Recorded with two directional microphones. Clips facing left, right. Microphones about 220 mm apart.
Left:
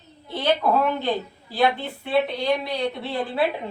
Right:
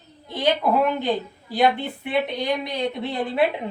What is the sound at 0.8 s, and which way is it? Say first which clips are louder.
Speech: right 1 dB; 15° right (ahead or behind).